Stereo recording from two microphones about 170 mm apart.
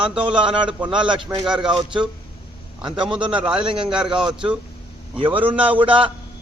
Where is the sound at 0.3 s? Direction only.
30° right (ahead or behind).